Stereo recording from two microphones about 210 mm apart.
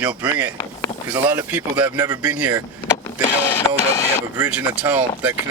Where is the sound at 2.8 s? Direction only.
15° left (ahead or behind).